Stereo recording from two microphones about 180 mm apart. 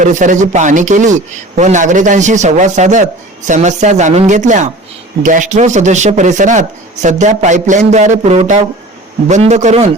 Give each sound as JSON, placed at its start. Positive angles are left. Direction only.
{"t": 0.0, "sound": "a man's voice", "side_deg": -45}